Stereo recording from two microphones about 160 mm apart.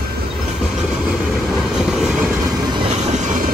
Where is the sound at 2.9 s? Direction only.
45° right (ahead or behind).